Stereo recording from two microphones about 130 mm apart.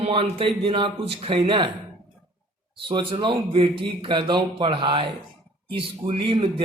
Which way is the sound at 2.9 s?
40° right (ahead or behind).